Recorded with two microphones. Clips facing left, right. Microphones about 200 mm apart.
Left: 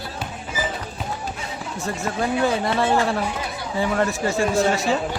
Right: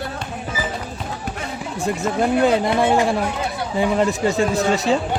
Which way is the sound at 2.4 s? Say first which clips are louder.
Right 3 dB; 15° right (ahead or behind).